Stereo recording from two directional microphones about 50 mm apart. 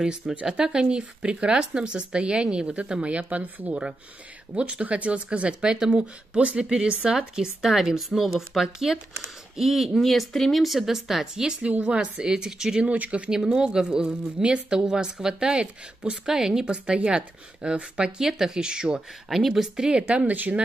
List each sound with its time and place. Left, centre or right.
0.0 s speech: centre
11.7 s speech: right
12.2 s speech: centre
12.9 s speech: right
13.3 s speech: centre
19.2 s speech: centre
19.9 s speech: centre
20.2 s speech: right